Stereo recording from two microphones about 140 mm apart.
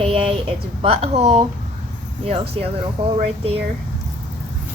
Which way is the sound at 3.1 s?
45° right (ahead or behind).